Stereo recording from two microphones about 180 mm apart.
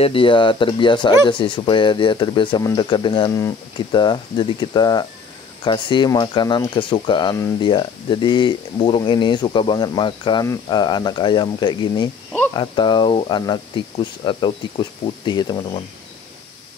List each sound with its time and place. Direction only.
0.0 s speech: 30° left (ahead or behind)